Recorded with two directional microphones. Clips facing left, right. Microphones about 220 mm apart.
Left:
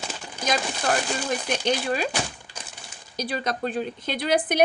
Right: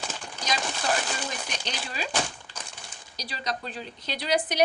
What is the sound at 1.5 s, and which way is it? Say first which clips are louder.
Speech: left 11 dB; 55° left (ahead or behind).